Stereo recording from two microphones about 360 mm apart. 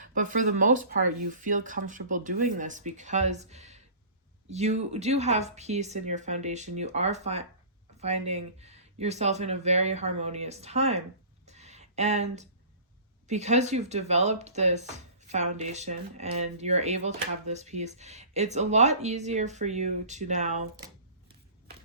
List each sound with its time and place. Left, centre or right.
0.0 s speech: right
11.4 s a sound: centre
13.2 s speech: centre